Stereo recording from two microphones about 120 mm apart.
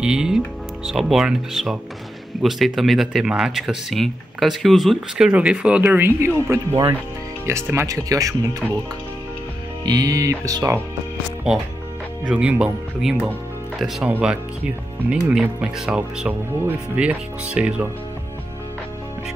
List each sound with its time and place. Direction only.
0.0 s speech: 5° right (ahead or behind); by 8.6 s 30° right (ahead or behind)
9.8 s speech: 30° right (ahead or behind)
12.3 s speech: 10° right (ahead or behind)